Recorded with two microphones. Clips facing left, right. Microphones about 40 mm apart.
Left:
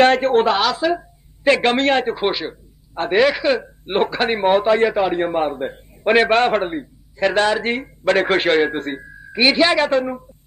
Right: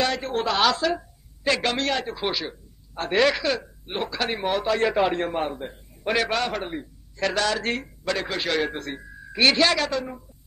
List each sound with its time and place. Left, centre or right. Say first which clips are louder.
0.0 s speech: left 11 dB; left
0.6 s speech: left 3 dB; centre
1.4 s speech: left 8 dB; left
3.1 s speech: left 5 dB; centre
3.8 s speech: left 10 dB; left
4.8 s speech: left 4 dB; centre
5.2 s speech: left 7 dB; centre
5.6 s a man's voice: left 10 dB; left
6.7 s speech: left 6 dB; left
8.0 s speech: left 14 dB; left
9.1 s speech: left 3 dB; centre
9.8 s speech: left 9 dB; left